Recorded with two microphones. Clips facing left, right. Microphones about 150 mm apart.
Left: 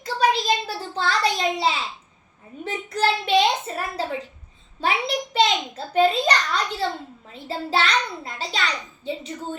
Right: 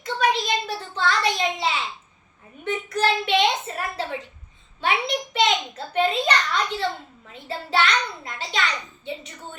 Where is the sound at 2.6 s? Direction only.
30° left (ahead or behind).